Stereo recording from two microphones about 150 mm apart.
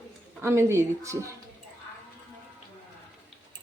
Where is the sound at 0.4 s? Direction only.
20° right (ahead or behind).